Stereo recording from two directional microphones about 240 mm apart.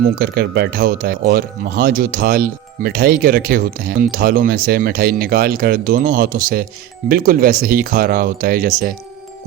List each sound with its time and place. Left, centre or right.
0.2 s speech: right